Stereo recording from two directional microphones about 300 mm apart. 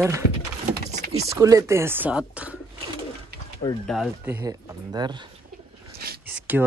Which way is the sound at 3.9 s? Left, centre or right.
Centre.